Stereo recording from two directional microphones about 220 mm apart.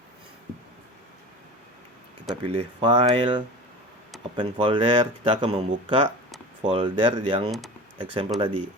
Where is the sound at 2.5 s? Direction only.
25° right (ahead or behind).